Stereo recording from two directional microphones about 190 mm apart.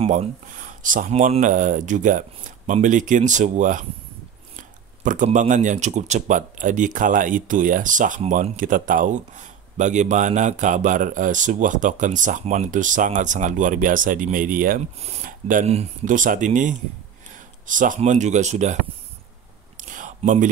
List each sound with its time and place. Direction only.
0.0 s speech: 35° right (ahead or behind)
15.0 s speech: 35° right (ahead or behind)
19.8 s a sound: 45° right (ahead or behind)